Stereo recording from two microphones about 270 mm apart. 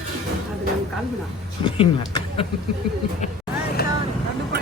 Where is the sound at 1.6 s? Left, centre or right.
Centre.